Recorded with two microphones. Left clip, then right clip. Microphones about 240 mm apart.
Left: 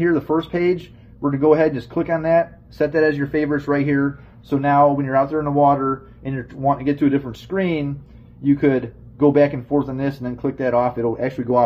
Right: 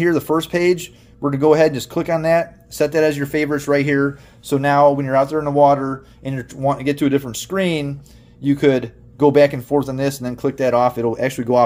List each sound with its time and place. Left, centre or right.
0.0 s speech: right